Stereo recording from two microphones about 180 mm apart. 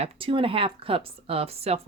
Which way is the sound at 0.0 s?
30° right (ahead or behind).